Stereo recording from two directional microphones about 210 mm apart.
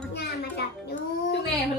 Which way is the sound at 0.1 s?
55° left (ahead or behind).